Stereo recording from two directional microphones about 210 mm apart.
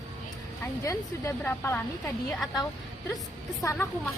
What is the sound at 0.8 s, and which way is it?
Speech, 15° left (ahead or behind).